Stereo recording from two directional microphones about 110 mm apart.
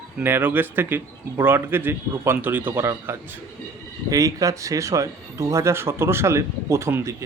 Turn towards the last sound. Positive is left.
turn(degrees=-25)  # may be behind; listen again after turning